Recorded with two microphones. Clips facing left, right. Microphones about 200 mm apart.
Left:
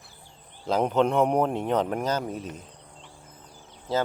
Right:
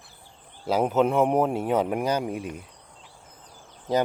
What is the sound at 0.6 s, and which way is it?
Speech, 5° right (ahead or behind).